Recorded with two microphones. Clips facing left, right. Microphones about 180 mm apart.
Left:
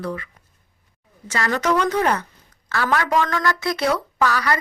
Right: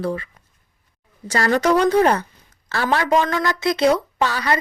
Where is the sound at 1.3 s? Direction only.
35° right (ahead or behind).